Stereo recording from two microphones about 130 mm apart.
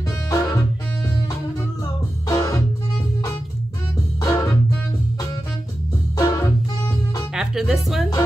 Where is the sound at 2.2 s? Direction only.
25° left (ahead or behind).